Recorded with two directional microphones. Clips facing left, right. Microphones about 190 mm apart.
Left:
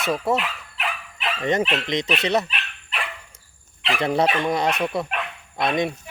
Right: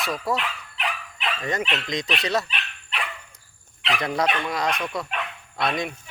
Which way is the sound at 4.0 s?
30° left (ahead or behind).